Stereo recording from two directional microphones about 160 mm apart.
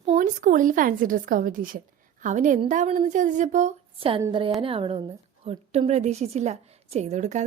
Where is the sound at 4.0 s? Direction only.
35° right (ahead or behind).